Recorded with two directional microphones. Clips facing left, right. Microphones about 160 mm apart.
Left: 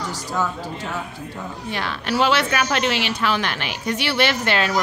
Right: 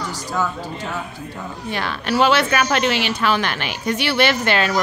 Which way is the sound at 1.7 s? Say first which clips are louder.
Right 2 dB; 50° right (ahead or behind).